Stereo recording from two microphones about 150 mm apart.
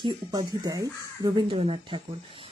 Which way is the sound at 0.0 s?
25° right (ahead or behind).